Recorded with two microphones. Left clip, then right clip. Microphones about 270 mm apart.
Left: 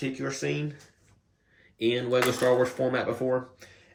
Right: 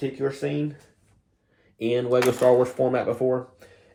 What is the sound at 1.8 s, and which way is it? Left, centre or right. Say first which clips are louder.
Speech: right 3 dB; centre.